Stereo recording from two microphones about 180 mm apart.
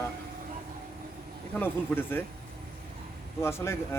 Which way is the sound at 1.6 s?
10° left (ahead or behind).